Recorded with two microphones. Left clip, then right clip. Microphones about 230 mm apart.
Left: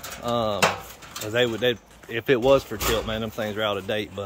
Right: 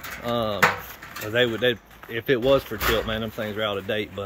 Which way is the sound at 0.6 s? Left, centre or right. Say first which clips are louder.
Right 2 dB; left.